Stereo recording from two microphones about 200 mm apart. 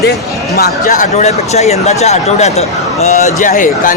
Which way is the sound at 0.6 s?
45° left (ahead or behind).